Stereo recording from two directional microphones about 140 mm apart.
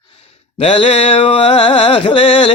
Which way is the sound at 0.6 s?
40° left (ahead or behind).